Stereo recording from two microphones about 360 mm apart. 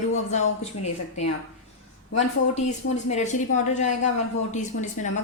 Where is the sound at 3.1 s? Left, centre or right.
Centre.